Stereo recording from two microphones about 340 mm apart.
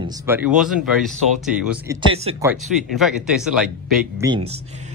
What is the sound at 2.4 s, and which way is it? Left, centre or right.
Speech, centre.